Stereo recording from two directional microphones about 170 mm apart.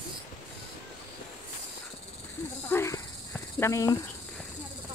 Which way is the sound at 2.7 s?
15° left (ahead or behind).